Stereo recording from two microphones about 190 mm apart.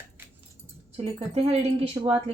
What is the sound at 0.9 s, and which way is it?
Speech, 30° right (ahead or behind).